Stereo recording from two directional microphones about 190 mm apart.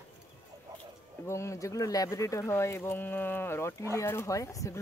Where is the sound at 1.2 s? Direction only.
15° left (ahead or behind).